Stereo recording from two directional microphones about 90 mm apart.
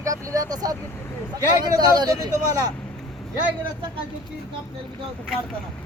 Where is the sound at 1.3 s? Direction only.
45° right (ahead or behind).